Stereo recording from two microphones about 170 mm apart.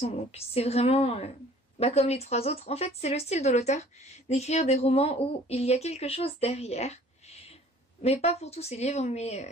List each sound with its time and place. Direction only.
0.0 s speech: 35° left (ahead or behind)